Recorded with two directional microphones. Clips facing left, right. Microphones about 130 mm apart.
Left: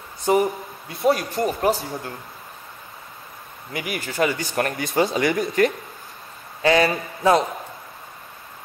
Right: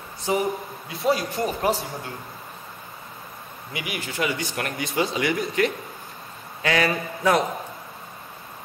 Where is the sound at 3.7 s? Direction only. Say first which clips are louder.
Left 3 dB; 45° left (ahead or behind).